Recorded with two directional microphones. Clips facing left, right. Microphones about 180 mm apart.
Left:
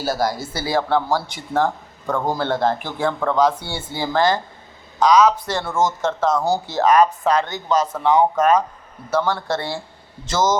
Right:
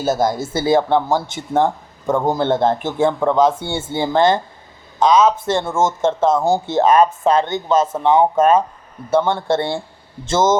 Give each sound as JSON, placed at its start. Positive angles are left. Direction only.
{"t": 0.0, "sound": "speech", "side_deg": -20}